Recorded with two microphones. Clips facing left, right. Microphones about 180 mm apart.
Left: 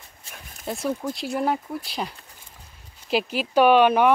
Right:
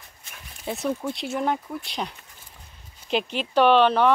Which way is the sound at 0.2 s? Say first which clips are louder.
Left 3 dB; 35° left (ahead or behind).